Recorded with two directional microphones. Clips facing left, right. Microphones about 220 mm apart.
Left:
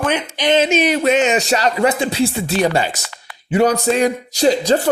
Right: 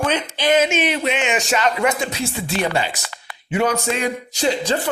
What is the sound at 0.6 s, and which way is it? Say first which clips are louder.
A man's voice: left 4 dB; 40° left (ahead or behind).